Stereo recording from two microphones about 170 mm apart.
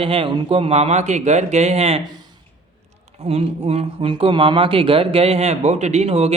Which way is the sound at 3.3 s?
35° right (ahead or behind).